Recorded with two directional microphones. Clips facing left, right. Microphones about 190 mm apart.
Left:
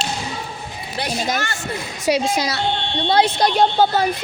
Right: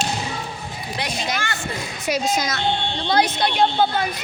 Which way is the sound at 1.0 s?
45° left (ahead or behind).